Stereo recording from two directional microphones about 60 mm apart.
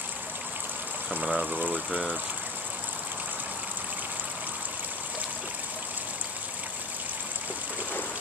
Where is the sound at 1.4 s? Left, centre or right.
Right.